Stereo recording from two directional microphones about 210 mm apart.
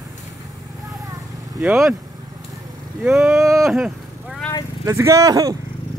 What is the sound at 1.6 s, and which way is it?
Speech, 5° right (ahead or behind).